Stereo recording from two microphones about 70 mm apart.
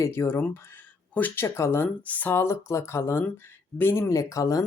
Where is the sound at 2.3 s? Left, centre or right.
Left.